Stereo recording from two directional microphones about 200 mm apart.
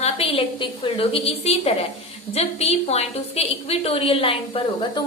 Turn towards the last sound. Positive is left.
turn(degrees=25)  # may be behind; listen again after turning